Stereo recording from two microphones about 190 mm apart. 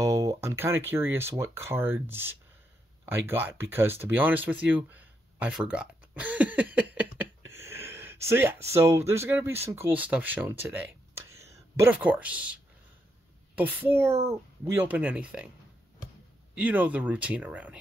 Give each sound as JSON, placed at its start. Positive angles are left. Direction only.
{"t": 0.0, "sound": "speech", "side_deg": -15}
{"t": 3.1, "sound": "a sound", "side_deg": -10}
{"t": 8.7, "sound": "speech", "side_deg": -15}
{"t": 13.7, "sound": "speech", "side_deg": -10}
{"t": 16.5, "sound": "speech", "side_deg": -10}